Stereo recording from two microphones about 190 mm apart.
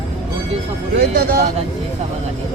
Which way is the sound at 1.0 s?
55° right (ahead or behind).